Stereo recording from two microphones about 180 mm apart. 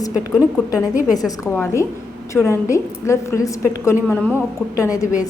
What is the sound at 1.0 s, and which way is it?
Speech, centre (ahead or behind).